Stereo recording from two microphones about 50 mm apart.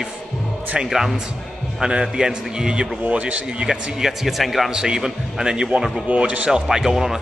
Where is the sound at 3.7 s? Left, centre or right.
Centre.